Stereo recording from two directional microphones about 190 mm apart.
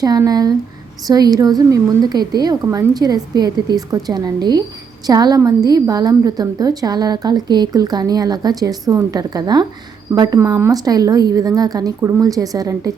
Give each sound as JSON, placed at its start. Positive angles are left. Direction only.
{"t": 0.0, "sound": "a woman's voice", "side_deg": -20}